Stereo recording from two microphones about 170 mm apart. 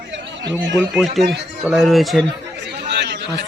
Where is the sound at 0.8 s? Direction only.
Centre (ahead or behind).